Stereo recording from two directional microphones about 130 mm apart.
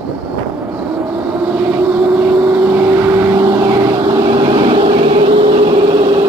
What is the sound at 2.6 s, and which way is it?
Vehicle, 20° right (ahead or behind).